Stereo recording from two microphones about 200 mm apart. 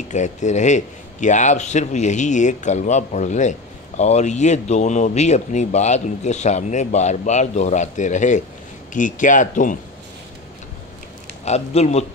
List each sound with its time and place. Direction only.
0.1 s a man's voice: 35° left (ahead or behind)
11.4 s a man's voice: 35° left (ahead or behind)